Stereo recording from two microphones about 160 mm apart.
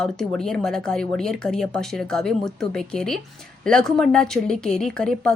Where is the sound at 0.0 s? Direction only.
5° left (ahead or behind).